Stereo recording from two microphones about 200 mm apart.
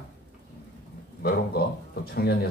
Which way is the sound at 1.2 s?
50° left (ahead or behind).